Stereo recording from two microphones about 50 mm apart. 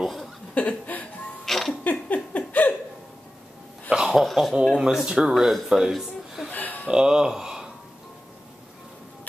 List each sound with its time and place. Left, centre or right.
0.0 s chuckle: centre
0.6 s chuckle: left
1.4 s music: centre
1.7 s a sound: left
3.9 s a sound: centre
4.2 s dog: centre
5.0 s speech: centre
5.3 s a man's voice: centre
6.5 s a sound: left
6.9 s speech: centre